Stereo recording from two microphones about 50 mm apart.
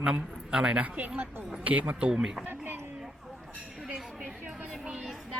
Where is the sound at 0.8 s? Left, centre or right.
Right.